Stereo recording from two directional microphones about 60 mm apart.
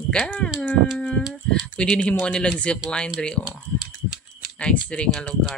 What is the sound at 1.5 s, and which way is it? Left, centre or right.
Speech, centre.